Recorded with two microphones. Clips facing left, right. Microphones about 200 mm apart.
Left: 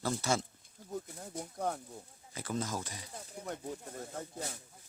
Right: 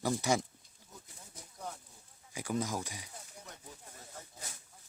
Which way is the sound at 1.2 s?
60° left (ahead or behind).